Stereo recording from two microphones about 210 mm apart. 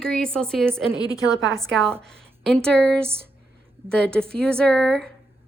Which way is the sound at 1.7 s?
5° left (ahead or behind).